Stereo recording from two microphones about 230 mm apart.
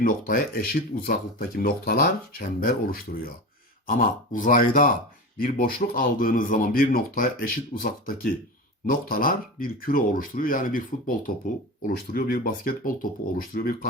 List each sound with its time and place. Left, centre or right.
0.0 s speech: left